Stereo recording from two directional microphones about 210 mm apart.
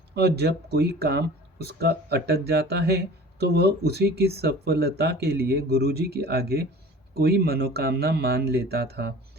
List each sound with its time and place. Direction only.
0.1 s speech: 50° right (ahead or behind)